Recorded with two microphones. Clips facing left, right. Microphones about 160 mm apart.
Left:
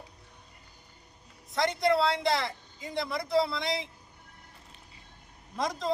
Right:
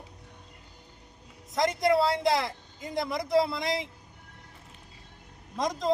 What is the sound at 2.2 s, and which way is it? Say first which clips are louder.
Speech: right 2 dB; centre (ahead or behind).